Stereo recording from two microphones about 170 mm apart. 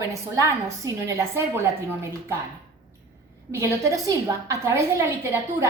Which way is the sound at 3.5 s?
15° right (ahead or behind).